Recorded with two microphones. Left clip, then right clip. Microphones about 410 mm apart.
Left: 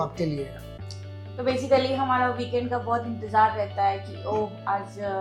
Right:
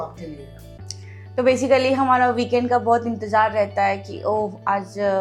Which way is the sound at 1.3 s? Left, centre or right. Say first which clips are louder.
Right 6 dB; right.